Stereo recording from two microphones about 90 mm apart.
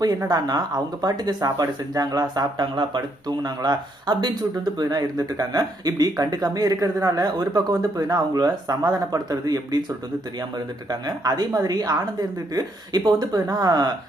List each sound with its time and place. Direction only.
0.3 s speech: 45° right (ahead or behind)
10.8 s speech: 45° right (ahead or behind)